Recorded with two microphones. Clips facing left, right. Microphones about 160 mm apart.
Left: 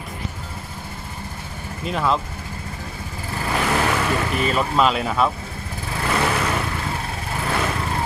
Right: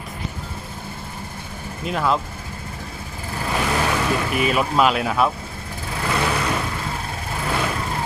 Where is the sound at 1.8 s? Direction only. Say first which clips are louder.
Even; centre (ahead or behind).